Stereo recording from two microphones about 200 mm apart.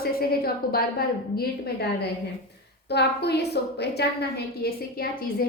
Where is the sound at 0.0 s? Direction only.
50° left (ahead or behind).